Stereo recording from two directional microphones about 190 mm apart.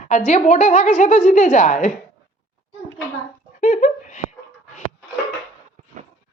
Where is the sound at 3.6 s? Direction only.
40° left (ahead or behind).